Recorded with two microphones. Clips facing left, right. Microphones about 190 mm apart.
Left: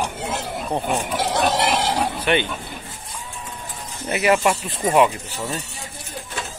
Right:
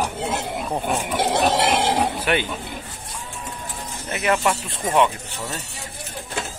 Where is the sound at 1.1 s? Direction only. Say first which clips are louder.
Right 2 dB; 25° right (ahead or behind).